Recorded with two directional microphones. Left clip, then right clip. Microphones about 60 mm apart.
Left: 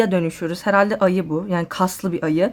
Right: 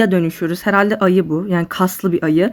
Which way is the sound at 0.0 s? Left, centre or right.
Right.